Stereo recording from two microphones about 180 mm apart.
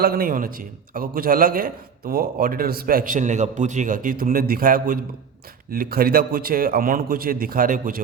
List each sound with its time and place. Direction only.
0.0 s a man's voice: 55° right (ahead or behind)